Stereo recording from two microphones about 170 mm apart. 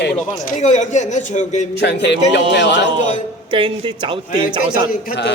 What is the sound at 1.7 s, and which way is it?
A man's voice, 85° left.